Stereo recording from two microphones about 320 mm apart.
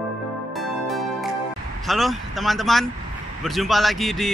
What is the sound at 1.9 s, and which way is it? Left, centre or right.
Speech, centre.